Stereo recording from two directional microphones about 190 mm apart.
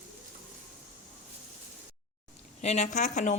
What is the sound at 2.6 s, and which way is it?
Speech, 35° left (ahead or behind).